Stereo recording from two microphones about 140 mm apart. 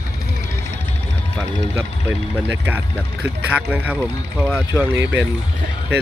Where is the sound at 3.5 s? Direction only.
10° right (ahead or behind).